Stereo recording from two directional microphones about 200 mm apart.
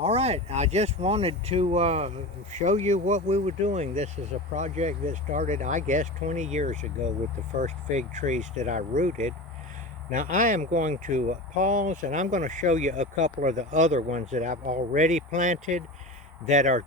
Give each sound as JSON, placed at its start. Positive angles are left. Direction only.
{"t": 0.0, "sound": "speech", "side_deg": -30}